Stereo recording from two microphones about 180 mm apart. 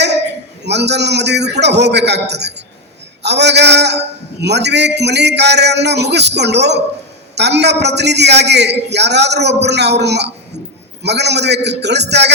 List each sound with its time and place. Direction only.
0.6 s a man's voice: 70° right (ahead or behind)